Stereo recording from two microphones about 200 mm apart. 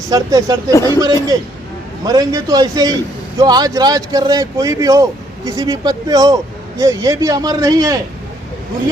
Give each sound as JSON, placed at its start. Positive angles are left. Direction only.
{"t": 0.1, "sound": "a man's voice", "side_deg": -20}
{"t": 0.7, "sound": "speech", "side_deg": 15}
{"t": 0.9, "sound": "a man's voice", "side_deg": -15}